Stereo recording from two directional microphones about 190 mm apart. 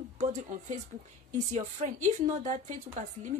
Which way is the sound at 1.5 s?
40° right (ahead or behind).